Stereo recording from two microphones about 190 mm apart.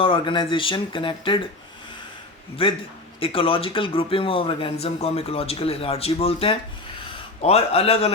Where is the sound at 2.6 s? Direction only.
30° left (ahead or behind).